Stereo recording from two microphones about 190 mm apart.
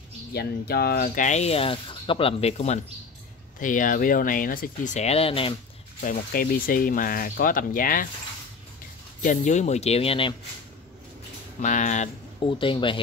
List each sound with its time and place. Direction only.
0.3 s speech: 55° left (ahead or behind); by 5.5 s 30° left (ahead or behind)
5.9 s speech: 45° left (ahead or behind)
9.2 s speech: 40° left (ahead or behind)
11.6 s speech: 40° left (ahead or behind)
12.4 s speech: 25° left (ahead or behind)